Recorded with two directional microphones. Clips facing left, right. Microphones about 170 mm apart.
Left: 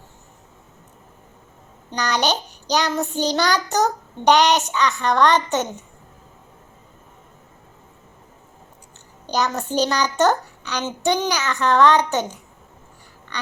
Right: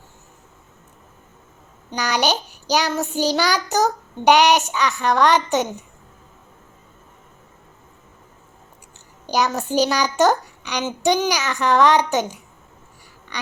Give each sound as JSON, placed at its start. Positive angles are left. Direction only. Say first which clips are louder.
{"t": 1.9, "sound": "child singing", "louder": "right 1 dB", "side_deg": -5}
{"t": 4.9, "sound": "a child's voice", "louder": "right 1 dB", "side_deg": -5}
{"t": 5.4, "sound": "child singing", "louder": "right 2 dB", "side_deg": -10}
{"t": 9.2, "sound": "child singing", "louder": "right 2 dB", "side_deg": -10}